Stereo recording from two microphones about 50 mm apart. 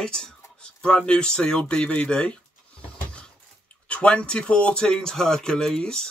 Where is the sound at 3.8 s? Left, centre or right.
Left.